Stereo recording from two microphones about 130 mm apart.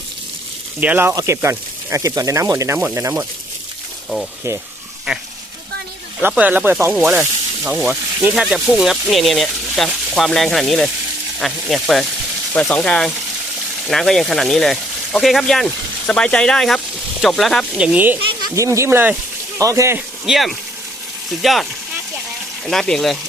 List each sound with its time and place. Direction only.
0.8 s sizzle: 15° right (ahead or behind)
1.1 s speech: 20° right (ahead or behind)
6.2 s sizzle: 15° right (ahead or behind)
8.4 s speech: 5° right (ahead or behind)
18.5 s speech: 25° right (ahead or behind)
20.2 s speech: centre (ahead or behind)